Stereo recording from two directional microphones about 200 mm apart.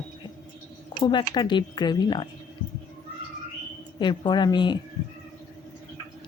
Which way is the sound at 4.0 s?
20° left (ahead or behind).